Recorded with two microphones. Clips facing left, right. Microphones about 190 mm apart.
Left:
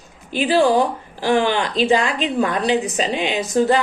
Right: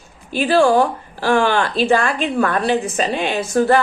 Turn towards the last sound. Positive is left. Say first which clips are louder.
# right 2 dB
turn(degrees=15)  # may be behind; listen again after turning